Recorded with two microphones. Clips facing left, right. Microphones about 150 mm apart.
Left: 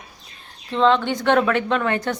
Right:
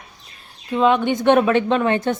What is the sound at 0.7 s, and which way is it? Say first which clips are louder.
A woman's voice: right 1 dB; 10° right (ahead or behind).